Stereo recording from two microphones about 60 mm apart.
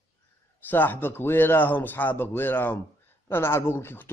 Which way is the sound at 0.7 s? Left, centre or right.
Left.